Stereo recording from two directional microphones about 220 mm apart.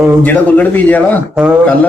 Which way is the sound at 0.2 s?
5° left (ahead or behind).